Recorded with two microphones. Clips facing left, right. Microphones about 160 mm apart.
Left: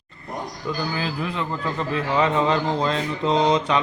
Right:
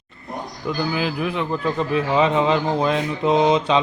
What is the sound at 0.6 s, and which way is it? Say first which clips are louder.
A man's voice: right 4 dB; 15° right (ahead or behind).